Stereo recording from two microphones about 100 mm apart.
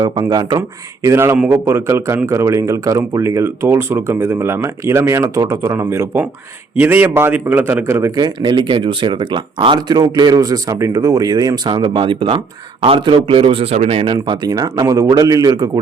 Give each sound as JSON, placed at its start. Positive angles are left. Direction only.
{"t": 0.0, "sound": "speech", "side_deg": -40}
{"t": 1.0, "sound": "speech", "side_deg": -30}
{"t": 8.1, "sound": "a man's voice", "side_deg": -50}
{"t": 14.1, "sound": "speech", "side_deg": -45}